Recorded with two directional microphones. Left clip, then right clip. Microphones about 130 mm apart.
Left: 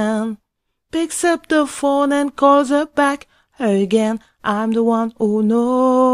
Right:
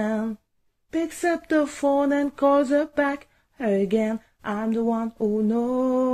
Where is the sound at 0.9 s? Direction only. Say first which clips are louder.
Left 7 dB; 35° left (ahead or behind).